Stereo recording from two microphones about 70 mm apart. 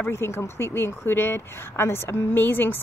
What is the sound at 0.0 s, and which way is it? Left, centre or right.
A woman's voice, left.